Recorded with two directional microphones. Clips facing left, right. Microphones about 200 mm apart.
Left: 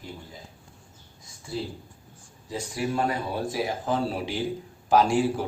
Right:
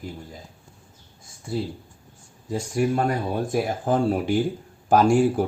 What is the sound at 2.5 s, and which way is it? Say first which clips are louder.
Speech: right 6 dB; 45° right (ahead or behind).